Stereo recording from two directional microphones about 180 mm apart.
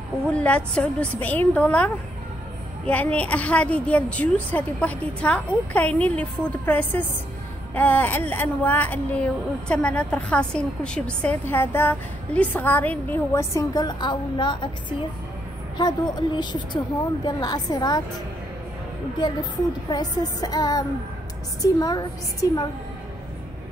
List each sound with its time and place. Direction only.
0.3 s a woman's voice: 5° left (ahead or behind)
2.9 s a woman's voice: 10° left (ahead or behind)
19.9 s a woman's voice: 20° left (ahead or behind)